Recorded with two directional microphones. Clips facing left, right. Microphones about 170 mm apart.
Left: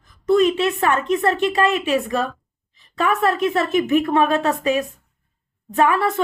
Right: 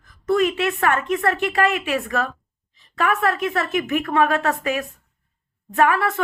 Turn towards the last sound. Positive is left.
turn(degrees=25)  # may be behind; listen again after turning